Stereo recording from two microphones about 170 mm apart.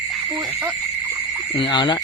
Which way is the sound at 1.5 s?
30° left (ahead or behind).